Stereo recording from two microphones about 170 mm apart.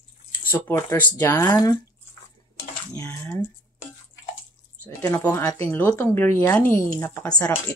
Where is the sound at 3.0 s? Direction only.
15° left (ahead or behind).